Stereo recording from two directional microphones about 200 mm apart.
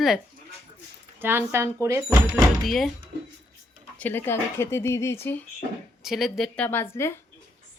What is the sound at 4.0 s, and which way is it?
Speech, 10° left (ahead or behind).